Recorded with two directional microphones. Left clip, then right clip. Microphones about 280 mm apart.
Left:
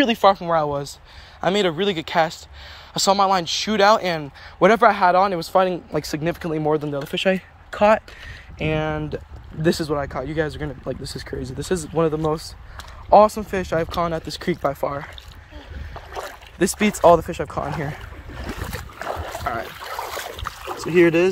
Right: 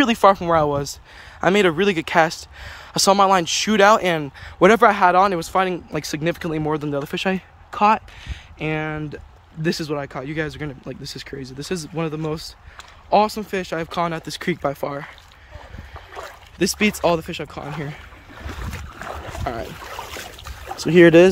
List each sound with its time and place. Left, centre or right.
0.0 s speech: centre
16.1 s boat: left
16.5 s speech: centre
18.4 s boat: left
21.0 s speech: right